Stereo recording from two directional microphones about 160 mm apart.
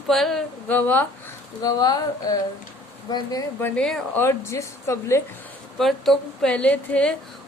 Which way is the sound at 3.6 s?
5° left (ahead or behind).